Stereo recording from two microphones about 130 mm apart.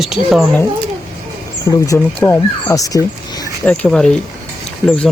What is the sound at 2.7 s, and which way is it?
Speech, 25° left (ahead or behind).